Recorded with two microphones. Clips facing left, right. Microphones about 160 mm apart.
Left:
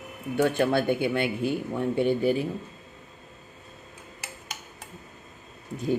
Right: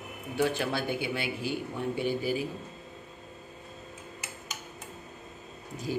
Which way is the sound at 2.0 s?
5° right (ahead or behind).